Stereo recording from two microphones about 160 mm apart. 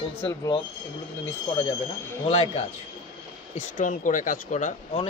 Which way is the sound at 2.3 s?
40° left (ahead or behind).